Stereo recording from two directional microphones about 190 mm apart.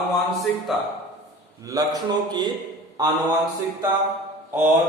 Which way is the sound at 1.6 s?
20° right (ahead or behind).